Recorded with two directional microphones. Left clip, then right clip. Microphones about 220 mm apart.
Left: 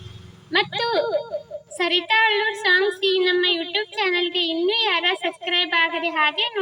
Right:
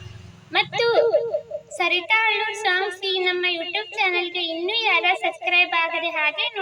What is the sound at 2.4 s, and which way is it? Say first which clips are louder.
A woman's voice: left 3 dB; 10° left (ahead or behind).